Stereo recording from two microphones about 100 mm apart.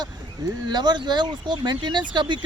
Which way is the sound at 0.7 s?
45° right (ahead or behind).